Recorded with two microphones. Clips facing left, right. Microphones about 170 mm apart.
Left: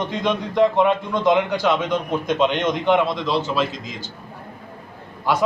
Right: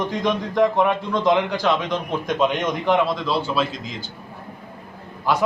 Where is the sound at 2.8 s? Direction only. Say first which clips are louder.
Even; centre (ahead or behind).